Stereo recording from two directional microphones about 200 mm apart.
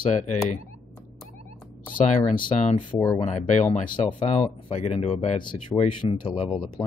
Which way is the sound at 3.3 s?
35° left (ahead or behind).